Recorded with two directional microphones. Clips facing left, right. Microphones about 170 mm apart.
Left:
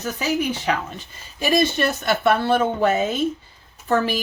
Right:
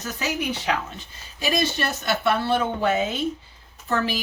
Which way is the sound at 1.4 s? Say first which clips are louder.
Left 5 dB; 55° left (ahead or behind).